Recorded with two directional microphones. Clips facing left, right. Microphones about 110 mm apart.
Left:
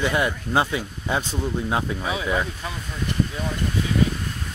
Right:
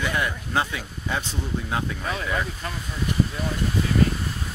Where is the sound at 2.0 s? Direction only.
5° left (ahead or behind).